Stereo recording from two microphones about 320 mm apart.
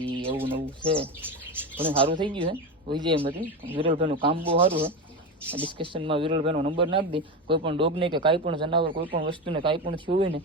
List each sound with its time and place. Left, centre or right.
0.1 s bird: centre
0.4 s speech: centre